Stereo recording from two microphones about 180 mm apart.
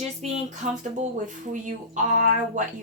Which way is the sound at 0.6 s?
40° right (ahead or behind).